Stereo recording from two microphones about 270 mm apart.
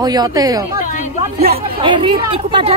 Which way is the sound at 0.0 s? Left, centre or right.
Centre.